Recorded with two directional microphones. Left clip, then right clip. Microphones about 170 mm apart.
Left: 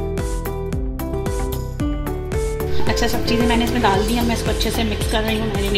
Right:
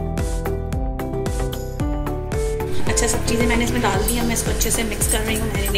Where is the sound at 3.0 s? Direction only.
45° left (ahead or behind).